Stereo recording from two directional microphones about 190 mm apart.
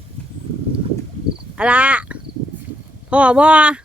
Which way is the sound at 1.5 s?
5° right (ahead or behind).